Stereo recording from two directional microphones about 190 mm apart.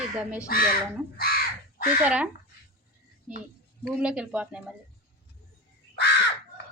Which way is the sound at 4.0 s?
5° right (ahead or behind).